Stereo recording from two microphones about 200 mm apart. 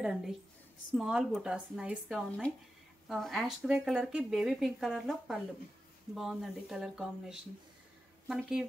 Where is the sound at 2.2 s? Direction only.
5° left (ahead or behind).